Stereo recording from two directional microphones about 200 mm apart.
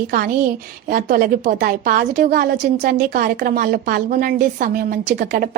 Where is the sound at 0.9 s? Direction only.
45° right (ahead or behind).